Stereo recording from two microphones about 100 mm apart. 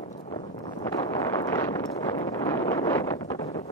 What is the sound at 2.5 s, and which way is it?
Wind noise, 25° left (ahead or behind).